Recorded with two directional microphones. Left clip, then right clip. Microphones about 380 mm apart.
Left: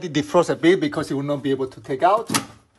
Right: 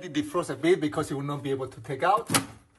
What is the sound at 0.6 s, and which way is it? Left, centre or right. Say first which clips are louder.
Speech: left 6 dB; left.